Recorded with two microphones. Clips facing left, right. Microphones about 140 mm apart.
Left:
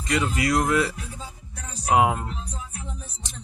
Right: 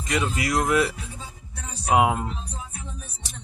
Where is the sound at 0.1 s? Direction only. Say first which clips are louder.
Left 1 dB; 15° right (ahead or behind).